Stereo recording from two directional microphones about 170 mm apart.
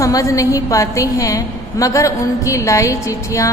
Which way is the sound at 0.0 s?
20° left (ahead or behind).